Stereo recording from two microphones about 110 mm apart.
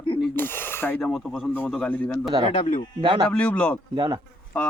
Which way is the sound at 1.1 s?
Centre (ahead or behind).